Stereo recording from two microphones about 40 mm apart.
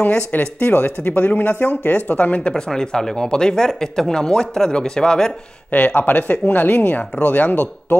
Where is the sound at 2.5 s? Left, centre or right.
Centre.